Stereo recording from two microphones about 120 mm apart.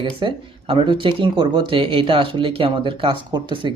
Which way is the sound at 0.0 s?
45° right (ahead or behind).